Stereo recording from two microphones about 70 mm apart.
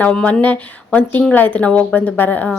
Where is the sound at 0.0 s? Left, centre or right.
Centre.